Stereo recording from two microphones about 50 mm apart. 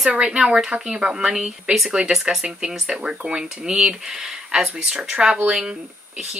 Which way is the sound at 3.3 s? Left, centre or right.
Centre.